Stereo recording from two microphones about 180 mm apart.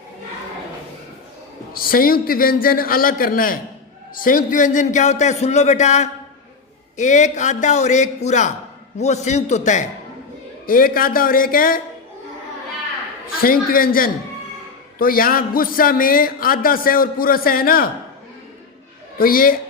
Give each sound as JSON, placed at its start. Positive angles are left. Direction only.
{"t": 1.7, "sound": "a man's voice", "side_deg": 55}
{"t": 10.7, "sound": "a man's voice", "side_deg": 50}
{"t": 13.2, "sound": "a man's voice", "side_deg": 55}
{"t": 19.2, "sound": "a man's voice", "side_deg": 55}